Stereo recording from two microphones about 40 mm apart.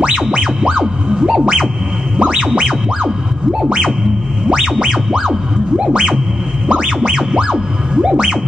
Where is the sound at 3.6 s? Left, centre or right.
Centre.